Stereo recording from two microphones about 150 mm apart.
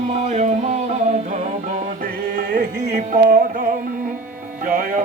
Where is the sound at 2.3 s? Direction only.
90° right; by 3.6 s 60° right (ahead or behind).